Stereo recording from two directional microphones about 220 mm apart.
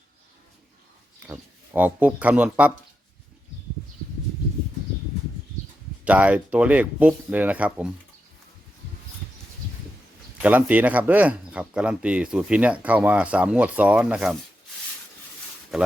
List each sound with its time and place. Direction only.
1.3 s speech: 5° right (ahead or behind)
6.1 s speech: 5° right (ahead or behind)
10.3 s speech: 5° right (ahead or behind)